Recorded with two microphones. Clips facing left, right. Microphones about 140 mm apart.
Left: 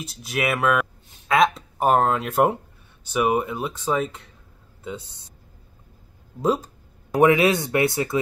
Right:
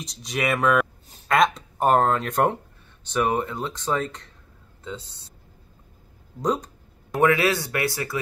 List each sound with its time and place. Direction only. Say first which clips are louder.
0.0 s a man's voice: left 1 dB; 5° left (ahead or behind)
6.4 s a sound: left 3 dB; 5° left (ahead or behind)
7.2 s speech: left 3 dB; 20° left (ahead or behind)